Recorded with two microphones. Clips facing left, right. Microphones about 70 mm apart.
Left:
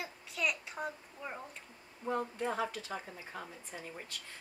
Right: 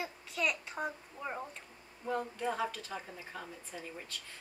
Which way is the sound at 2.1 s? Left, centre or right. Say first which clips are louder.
Even; centre.